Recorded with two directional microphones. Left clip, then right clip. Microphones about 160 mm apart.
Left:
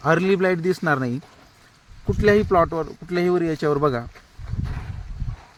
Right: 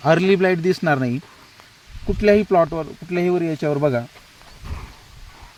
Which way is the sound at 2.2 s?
35° right (ahead or behind).